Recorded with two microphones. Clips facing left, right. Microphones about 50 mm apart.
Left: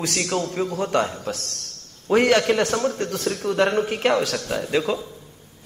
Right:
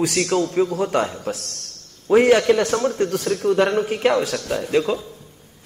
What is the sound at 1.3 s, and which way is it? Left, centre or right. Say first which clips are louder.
Speech: right 1 dB; left.